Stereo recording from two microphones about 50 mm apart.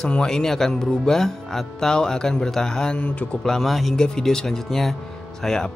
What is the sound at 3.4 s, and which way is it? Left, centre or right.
Speech, centre.